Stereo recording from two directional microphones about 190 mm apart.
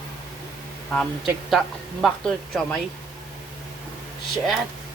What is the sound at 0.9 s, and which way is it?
A woman's voice, centre (ahead or behind).